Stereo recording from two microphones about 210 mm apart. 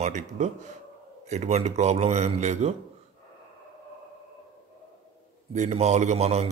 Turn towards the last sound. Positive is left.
turn(degrees=-30)  # may be behind; listen again after turning